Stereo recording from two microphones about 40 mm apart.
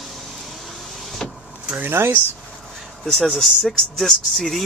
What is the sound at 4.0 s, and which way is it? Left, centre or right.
Speech, centre.